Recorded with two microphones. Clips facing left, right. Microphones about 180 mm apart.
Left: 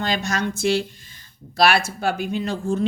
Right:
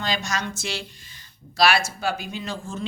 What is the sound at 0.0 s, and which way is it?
A woman's voice, 55° left (ahead or behind).